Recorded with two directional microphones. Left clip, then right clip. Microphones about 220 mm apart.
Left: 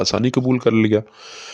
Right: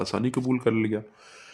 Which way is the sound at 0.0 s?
35° left (ahead or behind).